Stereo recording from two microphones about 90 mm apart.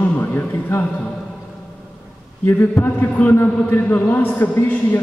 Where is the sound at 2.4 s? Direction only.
25° left (ahead or behind).